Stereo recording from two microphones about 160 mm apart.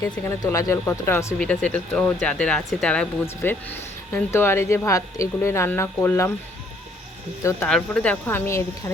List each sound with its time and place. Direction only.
0.0 s speech: 20° left (ahead or behind)
7.7 s speech: 5° left (ahead or behind)